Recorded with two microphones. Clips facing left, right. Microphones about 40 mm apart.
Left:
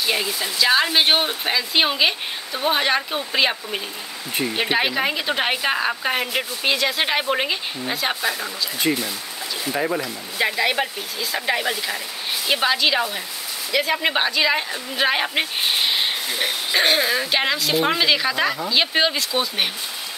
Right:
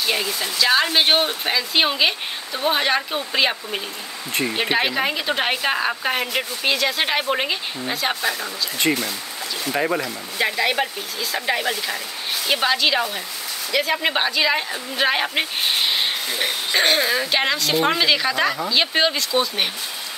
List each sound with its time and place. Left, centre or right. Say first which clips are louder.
0.0 s a woman's voice: even; centre
9.7 s a woman's voice: right 1 dB; centre